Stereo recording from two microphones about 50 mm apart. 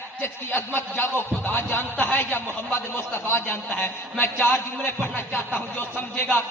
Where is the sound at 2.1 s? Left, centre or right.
Left.